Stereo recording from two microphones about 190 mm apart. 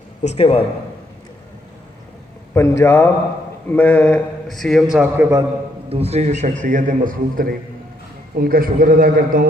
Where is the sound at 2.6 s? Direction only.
15° left (ahead or behind); by 5.4 s 10° right (ahead or behind).